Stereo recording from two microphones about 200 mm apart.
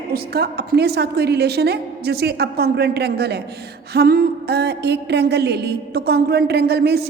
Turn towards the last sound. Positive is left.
turn(degrees=-55)  # may be behind; listen again after turning